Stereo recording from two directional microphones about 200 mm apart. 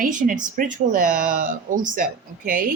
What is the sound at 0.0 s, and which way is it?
Speech, 40° right (ahead or behind).